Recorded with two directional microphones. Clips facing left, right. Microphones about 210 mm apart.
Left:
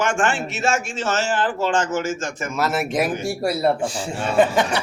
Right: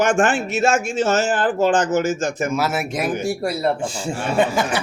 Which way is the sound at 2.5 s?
Centre (ahead or behind).